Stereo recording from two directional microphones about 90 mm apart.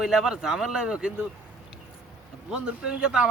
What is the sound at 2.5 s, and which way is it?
Speech, 10° right (ahead or behind).